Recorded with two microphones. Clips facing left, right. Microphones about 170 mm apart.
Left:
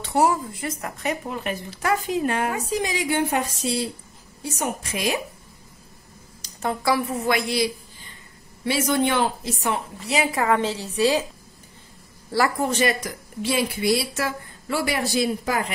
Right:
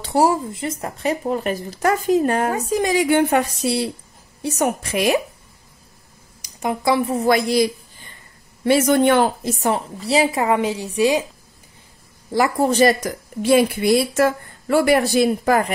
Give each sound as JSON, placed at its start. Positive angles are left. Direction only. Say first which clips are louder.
{"t": 0.0, "sound": "a woman's voice", "louder": "right 3 dB", "side_deg": -30}
{"t": 6.4, "sound": "a woman's voice", "louder": "right 3 dB", "side_deg": -15}
{"t": 10.4, "sound": "a woman's voice", "louder": "right 3 dB", "side_deg": -15}
{"t": 12.3, "sound": "a man's voice", "louder": "right 3 dB", "side_deg": -20}
{"t": 12.5, "sound": "a woman's voice", "louder": "right 7 dB", "side_deg": -35}